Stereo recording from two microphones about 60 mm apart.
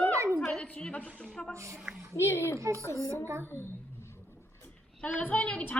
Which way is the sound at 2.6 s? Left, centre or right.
Right.